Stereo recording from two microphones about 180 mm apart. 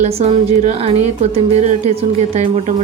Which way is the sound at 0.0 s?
35° right (ahead or behind).